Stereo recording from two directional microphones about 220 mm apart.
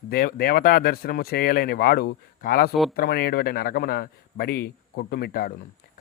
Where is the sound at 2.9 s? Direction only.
45° left (ahead or behind).